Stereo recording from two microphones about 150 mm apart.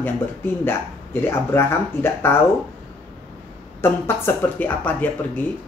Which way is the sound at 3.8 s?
15° left (ahead or behind).